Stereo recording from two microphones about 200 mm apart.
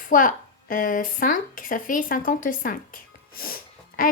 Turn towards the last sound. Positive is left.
turn(degrees=45)  # may be behind; listen again after turning